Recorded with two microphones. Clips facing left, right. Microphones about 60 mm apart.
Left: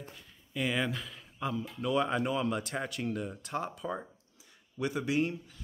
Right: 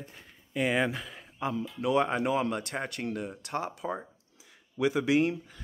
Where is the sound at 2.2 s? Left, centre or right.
Right.